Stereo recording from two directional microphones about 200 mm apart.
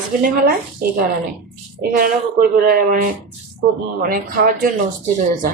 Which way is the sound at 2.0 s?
45° right (ahead or behind).